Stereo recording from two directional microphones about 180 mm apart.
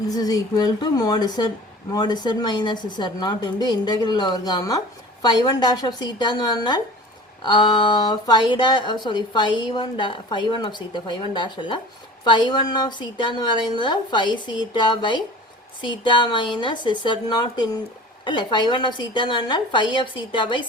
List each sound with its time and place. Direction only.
0.1 s speech: 20° left (ahead or behind)